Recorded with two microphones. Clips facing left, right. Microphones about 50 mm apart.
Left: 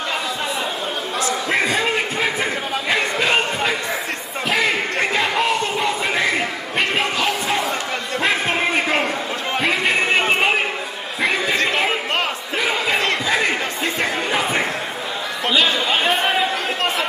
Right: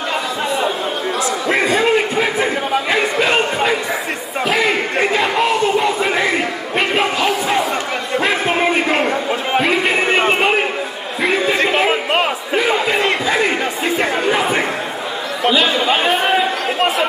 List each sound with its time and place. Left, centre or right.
1.5 s a sound: centre
11.4 s music: centre
12.5 s crowd: centre
15.4 s chatter: centre